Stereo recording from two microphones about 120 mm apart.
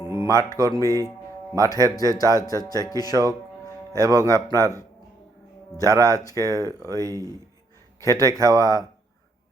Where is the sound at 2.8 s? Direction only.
30° left (ahead or behind).